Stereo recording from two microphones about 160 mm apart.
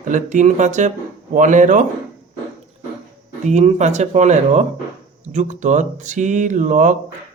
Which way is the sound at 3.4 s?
45° right (ahead or behind).